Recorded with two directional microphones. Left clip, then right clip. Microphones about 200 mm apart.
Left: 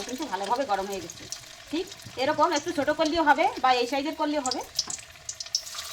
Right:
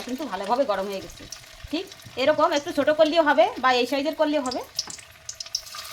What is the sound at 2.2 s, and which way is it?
A woman's voice, 55° right (ahead or behind).